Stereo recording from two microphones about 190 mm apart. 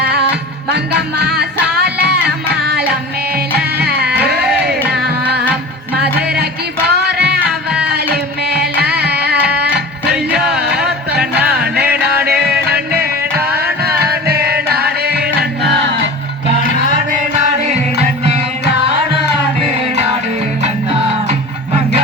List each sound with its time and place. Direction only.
0.7 s music: 60° right (ahead or behind)
6.2 s music: 60° right (ahead or behind)
10.5 s music: 5° right (ahead or behind)
11.6 s music: 55° right (ahead or behind)
17.4 s music: 35° right (ahead or behind)